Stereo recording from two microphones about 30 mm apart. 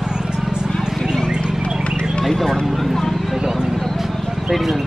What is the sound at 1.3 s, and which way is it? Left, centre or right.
Horse, right.